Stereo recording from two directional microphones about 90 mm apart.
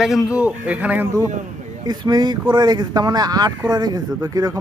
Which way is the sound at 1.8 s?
55° right (ahead or behind).